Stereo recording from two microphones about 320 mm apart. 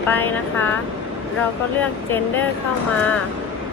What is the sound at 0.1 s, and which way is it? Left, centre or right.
Speech, centre.